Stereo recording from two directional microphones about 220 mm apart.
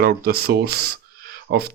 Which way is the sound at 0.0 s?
45° right (ahead or behind).